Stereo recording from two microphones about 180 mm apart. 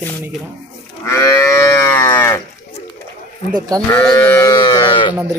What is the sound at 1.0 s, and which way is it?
Livestock, 15° left (ahead or behind).